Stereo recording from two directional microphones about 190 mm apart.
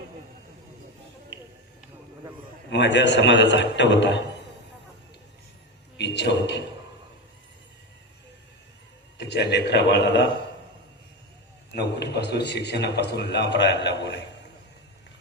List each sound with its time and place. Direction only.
2.6 s a man's voice: 65° left (ahead or behind)
6.0 s a sound: 65° left (ahead or behind)
9.1 s a man's voice: 65° left (ahead or behind)
11.7 s a man's voice: 60° left (ahead or behind)